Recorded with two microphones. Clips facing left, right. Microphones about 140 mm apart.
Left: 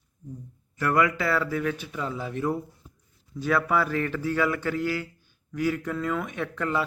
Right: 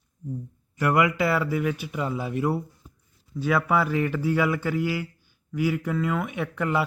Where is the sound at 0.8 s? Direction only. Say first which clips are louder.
Right 2 dB; 15° right (ahead or behind).